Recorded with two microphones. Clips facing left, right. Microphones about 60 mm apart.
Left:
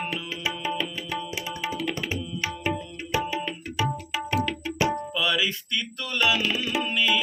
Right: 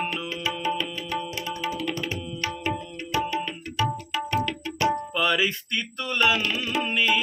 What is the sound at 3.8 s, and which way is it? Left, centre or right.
Tabla, centre.